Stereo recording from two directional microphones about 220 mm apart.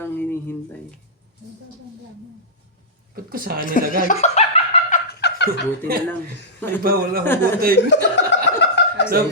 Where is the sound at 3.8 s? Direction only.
40° left (ahead or behind).